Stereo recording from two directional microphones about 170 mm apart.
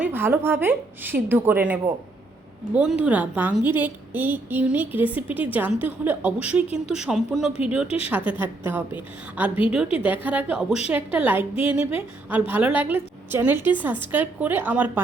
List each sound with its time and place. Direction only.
0.0 s a woman's voice: 10° right (ahead or behind)
7.9 s a woman's voice: 35° left (ahead or behind)
8.3 s a woman's voice: 10° right (ahead or behind)